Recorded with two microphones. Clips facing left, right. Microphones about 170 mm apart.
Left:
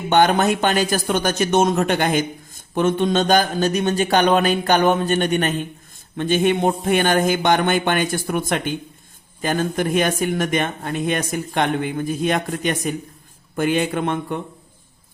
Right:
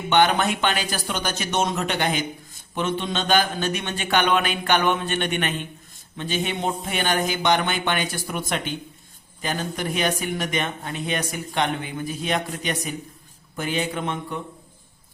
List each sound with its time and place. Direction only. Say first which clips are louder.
0.1 s speech: left 4 dB; 45° left (ahead or behind)
6.1 s speech: left 9 dB; 55° left (ahead or behind)